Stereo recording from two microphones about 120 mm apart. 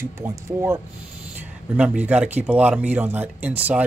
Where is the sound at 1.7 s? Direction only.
10° right (ahead or behind).